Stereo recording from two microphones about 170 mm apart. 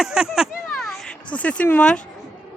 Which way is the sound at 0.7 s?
5° left (ahead or behind).